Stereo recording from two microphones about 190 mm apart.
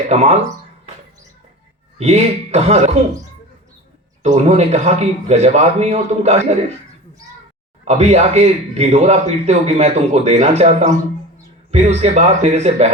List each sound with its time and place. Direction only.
0.1 s a man's voice: 35° right (ahead or behind)
2.0 s a man's voice: 35° right (ahead or behind)
4.2 s a man's voice: 35° right (ahead or behind)
7.9 s a man's voice: 35° right (ahead or behind)